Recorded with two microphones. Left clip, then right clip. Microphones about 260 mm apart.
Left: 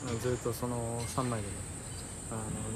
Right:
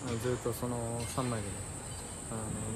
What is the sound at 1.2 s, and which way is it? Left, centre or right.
Speech, centre.